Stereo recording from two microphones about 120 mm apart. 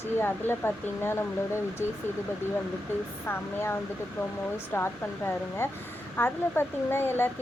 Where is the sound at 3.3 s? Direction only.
20° left (ahead or behind).